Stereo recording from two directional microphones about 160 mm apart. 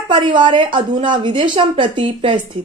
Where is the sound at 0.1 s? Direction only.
30° right (ahead or behind).